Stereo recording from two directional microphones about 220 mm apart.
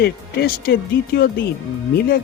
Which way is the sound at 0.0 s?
45° left (ahead or behind).